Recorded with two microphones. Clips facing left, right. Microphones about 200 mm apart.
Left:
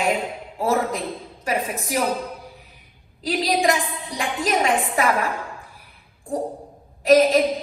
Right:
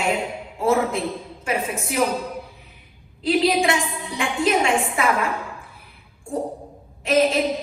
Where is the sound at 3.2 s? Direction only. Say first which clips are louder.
Right 2 dB; 35° left (ahead or behind).